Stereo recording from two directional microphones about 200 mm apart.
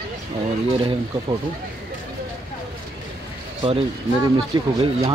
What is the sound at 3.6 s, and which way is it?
Speech, 30° right (ahead or behind).